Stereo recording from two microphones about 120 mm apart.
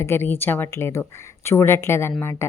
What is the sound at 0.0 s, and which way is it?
A woman's voice, 20° left (ahead or behind).